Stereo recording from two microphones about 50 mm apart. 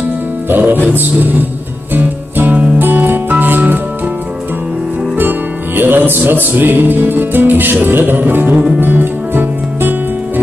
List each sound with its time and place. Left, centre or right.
0.5 s music: right
5.8 s music: right